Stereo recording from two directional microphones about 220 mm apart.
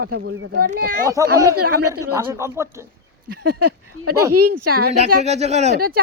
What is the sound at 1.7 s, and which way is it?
Speech, 90° right.